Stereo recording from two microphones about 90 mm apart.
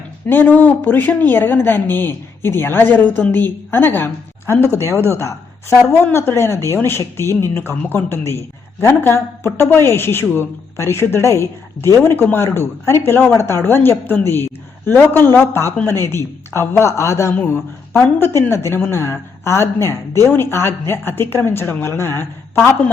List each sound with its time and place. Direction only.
0.3 s speech: 20° left (ahead or behind)